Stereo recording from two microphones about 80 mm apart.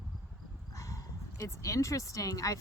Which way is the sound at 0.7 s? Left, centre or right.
Left.